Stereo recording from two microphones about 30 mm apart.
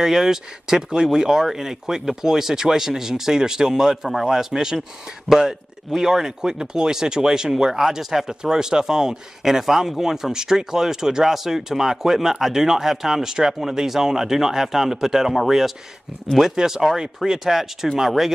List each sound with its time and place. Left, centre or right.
0.0 s speech: centre
16.3 s speech: centre
17.5 s speech: centre